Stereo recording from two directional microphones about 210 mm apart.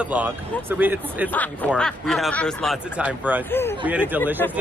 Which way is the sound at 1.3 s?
5° left (ahead or behind).